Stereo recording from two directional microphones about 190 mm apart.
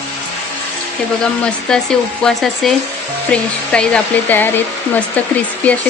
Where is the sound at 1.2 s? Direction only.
5° left (ahead or behind).